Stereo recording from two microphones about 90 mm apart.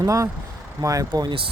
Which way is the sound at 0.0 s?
35° right (ahead or behind).